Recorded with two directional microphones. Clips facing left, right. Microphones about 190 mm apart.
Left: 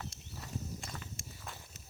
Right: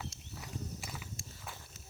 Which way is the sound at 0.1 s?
60° left (ahead or behind).